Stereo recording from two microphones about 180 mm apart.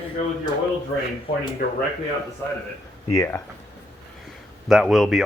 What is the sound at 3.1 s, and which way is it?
Speech, 15° left (ahead or behind).